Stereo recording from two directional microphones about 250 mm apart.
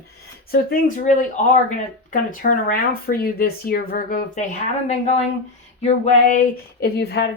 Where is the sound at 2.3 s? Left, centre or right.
Left.